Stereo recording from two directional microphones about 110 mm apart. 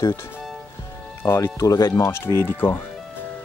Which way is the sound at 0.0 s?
25° left (ahead or behind).